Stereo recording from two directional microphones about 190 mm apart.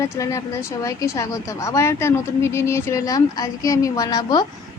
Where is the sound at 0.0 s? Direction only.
15° left (ahead or behind).